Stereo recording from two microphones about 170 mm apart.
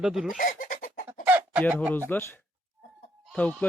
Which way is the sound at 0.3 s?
55° left (ahead or behind).